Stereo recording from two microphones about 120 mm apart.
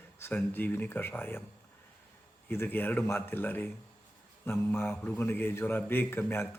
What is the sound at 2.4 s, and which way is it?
Speech, 15° left (ahead or behind).